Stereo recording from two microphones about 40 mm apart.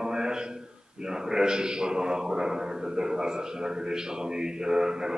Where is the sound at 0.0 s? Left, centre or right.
Centre.